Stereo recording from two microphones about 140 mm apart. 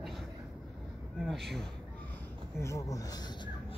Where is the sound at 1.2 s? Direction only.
Centre (ahead or behind).